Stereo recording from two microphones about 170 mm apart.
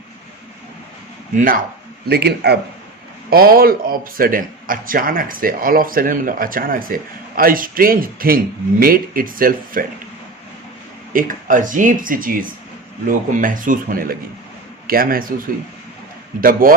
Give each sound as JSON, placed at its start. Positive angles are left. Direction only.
{"t": 1.4, "sound": "speech", "side_deg": -55}
{"t": 2.0, "sound": "a man's voice", "side_deg": -70}
{"t": 11.1, "sound": "speech", "side_deg": -55}
{"t": 16.4, "sound": "speech", "side_deg": -55}